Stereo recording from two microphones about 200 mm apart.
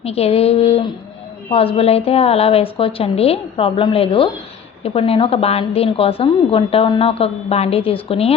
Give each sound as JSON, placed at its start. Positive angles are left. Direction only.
{"t": 0.0, "sound": "a woman's voice", "side_deg": 30}